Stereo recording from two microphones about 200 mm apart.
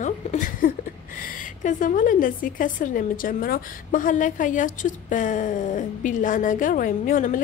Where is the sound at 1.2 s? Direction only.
40° left (ahead or behind).